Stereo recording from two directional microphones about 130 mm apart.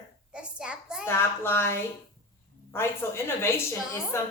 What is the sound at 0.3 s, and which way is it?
Hands, 10° right (ahead or behind).